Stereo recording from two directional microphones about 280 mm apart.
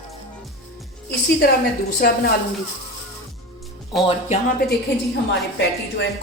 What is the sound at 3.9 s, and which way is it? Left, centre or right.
Speech, centre.